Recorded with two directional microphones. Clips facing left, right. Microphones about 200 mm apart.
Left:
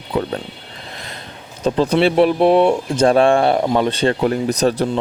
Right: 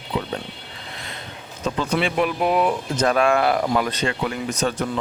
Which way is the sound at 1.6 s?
35° left (ahead or behind).